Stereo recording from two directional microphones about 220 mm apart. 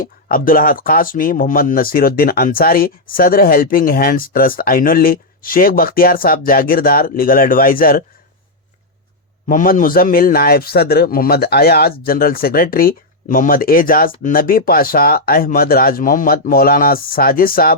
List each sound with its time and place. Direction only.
0.0 s speech: 40° left (ahead or behind)
9.5 s speech: 35° left (ahead or behind)